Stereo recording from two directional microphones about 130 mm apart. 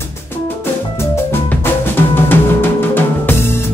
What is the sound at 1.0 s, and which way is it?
Music, 15° left (ahead or behind).